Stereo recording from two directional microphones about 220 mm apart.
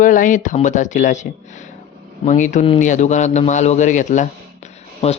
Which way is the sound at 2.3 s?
35° left (ahead or behind).